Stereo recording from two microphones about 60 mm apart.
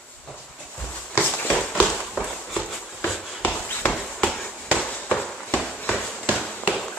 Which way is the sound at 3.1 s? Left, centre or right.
Centre.